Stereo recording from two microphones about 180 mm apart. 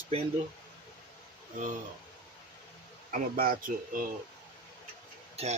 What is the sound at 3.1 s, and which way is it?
Speech, 55° right (ahead or behind).